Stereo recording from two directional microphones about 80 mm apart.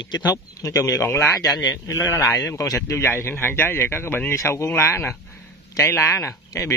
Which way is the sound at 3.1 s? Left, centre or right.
Left.